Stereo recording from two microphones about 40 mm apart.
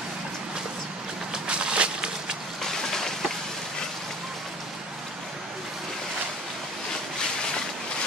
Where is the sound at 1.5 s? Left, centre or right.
Right.